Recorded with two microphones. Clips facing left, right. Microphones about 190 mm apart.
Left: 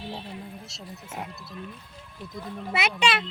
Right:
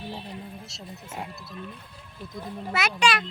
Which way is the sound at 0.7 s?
Centre (ahead or behind).